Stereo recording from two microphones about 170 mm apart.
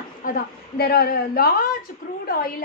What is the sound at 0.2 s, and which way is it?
A woman's voice, 60° left (ahead or behind).